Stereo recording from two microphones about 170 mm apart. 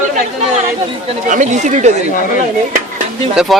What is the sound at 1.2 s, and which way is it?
Speech, 45° right (ahead or behind).